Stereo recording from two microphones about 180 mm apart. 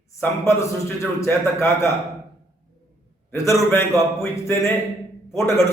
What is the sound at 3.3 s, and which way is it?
A man's voice, 15° left (ahead or behind).